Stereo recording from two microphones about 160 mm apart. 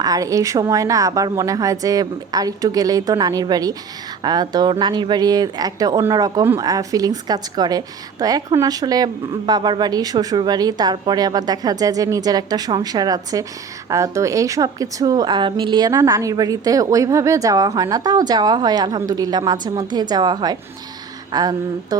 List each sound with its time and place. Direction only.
0.0 s a woman's voice: 20° right (ahead or behind)